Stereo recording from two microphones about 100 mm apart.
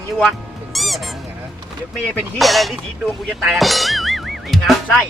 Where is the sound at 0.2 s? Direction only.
Centre (ahead or behind).